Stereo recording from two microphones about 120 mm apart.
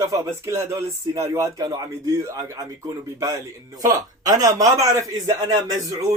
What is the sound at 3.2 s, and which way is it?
Speech, 30° right (ahead or behind).